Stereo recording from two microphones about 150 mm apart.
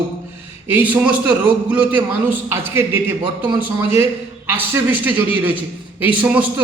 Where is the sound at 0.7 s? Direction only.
10° right (ahead or behind).